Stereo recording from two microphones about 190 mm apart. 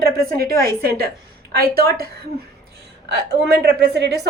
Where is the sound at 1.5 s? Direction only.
55° right (ahead or behind).